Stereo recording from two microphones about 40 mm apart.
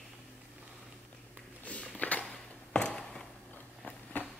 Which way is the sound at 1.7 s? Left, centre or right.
Left.